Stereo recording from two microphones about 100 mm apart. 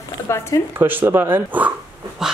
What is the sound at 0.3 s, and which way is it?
Speech, 25° left (ahead or behind).